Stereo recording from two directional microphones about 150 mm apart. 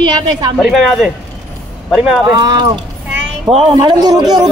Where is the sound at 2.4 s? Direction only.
30° right (ahead or behind).